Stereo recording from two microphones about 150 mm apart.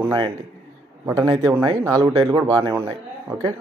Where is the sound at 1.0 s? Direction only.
25° right (ahead or behind).